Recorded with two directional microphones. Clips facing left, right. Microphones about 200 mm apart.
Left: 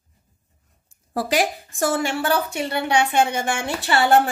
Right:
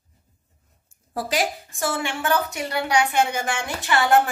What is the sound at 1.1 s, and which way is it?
A woman's voice, 65° left (ahead or behind).